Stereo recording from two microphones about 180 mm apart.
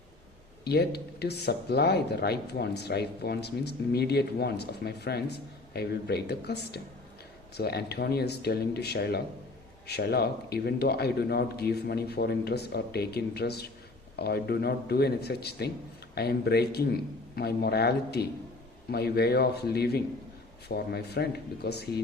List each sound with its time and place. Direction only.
0.6 s speech: 65° left (ahead or behind)